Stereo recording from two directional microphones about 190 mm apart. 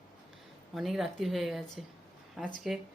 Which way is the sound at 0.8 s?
Centre (ahead or behind).